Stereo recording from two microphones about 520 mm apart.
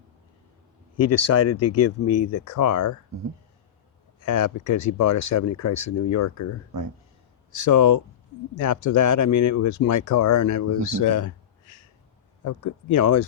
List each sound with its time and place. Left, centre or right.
0.9 s speech: left
4.2 s speech: left
12.5 s speech: left